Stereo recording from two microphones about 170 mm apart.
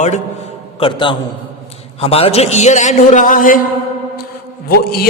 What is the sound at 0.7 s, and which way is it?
A man's voice, 30° left (ahead or behind).